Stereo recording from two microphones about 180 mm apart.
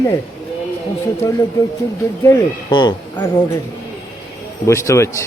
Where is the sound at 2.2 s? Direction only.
20° left (ahead or behind).